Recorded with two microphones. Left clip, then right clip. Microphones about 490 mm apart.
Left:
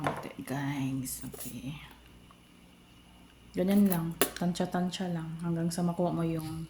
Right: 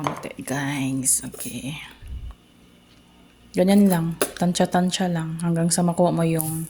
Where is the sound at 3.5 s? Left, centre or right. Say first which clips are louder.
Right 10 dB; left.